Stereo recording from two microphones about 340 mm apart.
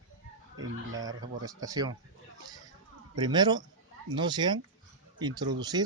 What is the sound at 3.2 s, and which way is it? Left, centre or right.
Speech, centre.